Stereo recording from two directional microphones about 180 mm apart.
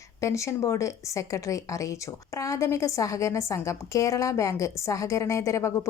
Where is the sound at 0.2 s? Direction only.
15° left (ahead or behind).